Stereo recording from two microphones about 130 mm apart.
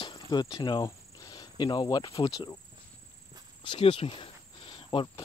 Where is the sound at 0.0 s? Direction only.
35° left (ahead or behind).